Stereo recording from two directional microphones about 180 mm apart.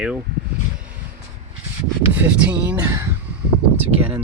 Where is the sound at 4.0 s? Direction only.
5° right (ahead or behind).